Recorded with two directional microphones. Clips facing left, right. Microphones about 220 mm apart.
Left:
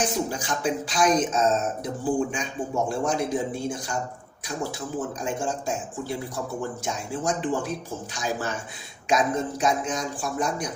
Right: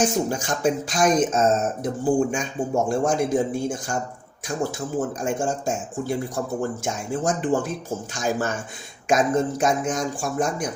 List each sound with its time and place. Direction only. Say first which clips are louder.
0.0 s a man's voice: right 5 dB; 45° right (ahead or behind)
4.9 s a man's voice: right 5 dB; 45° right (ahead or behind)